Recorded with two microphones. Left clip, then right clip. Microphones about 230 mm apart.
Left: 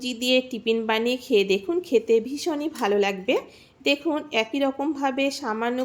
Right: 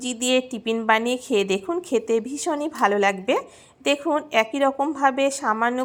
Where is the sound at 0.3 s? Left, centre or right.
Centre.